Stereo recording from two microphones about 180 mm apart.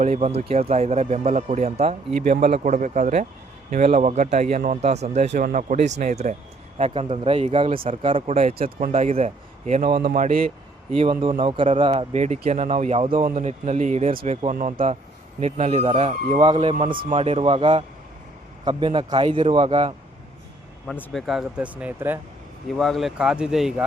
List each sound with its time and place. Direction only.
0.0 s a man's voice: 40° right (ahead or behind)
9.9 s speech: 55° right (ahead or behind)
10.9 s a man's voice: 30° right (ahead or behind)
15.4 s a man's voice: 40° right (ahead or behind)
20.8 s speech: 5° left (ahead or behind); by 22.2 s 10° right (ahead or behind)
22.8 s speech: centre (ahead or behind)